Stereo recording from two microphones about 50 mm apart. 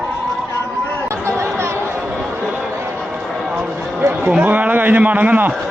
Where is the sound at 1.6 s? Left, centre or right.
Right.